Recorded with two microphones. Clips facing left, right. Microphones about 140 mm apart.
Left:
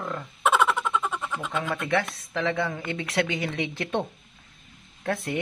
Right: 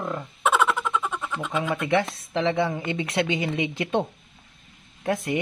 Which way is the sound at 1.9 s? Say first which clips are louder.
Right 3 dB; 25° right (ahead or behind).